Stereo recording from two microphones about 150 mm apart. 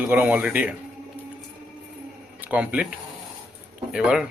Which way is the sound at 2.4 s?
10° right (ahead or behind).